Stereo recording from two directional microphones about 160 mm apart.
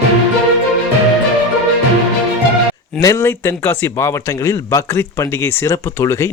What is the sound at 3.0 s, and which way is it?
Speech, 15° left (ahead or behind).